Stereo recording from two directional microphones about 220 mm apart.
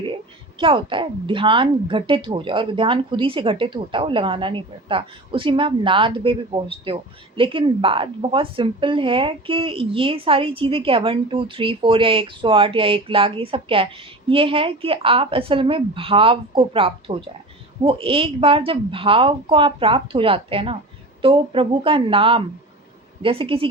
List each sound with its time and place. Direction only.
0.6 s speech: 25° right (ahead or behind)